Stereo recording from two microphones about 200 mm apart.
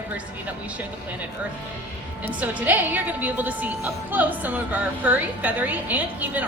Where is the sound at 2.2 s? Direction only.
10° right (ahead or behind).